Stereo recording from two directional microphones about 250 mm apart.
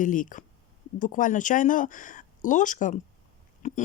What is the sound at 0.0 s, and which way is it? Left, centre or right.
Speech, left.